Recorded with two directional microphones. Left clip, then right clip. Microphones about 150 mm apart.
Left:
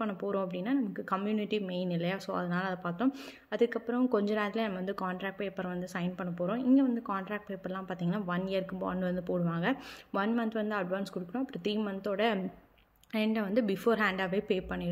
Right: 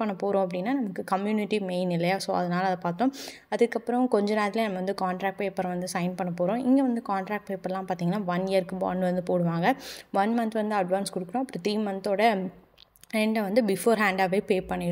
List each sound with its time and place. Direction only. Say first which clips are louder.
0.0 s a woman's voice: right 7 dB; 40° right (ahead or behind)